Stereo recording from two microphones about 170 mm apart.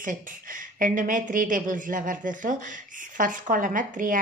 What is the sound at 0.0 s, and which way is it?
A woman's voice, 55° right (ahead or behind).